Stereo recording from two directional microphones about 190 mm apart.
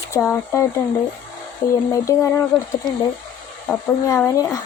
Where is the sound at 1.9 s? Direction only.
15° left (ahead or behind).